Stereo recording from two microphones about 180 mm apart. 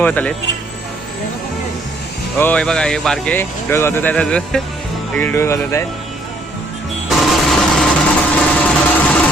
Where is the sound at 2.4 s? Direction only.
10° left (ahead or behind).